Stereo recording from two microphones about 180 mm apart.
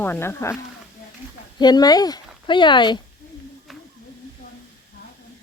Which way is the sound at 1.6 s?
20° left (ahead or behind).